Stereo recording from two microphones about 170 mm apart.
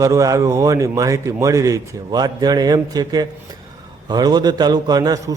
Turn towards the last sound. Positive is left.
turn(degrees=-20)  # may be behind; listen again after turning